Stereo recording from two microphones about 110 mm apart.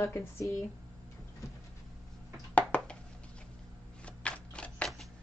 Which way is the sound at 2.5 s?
10° left (ahead or behind).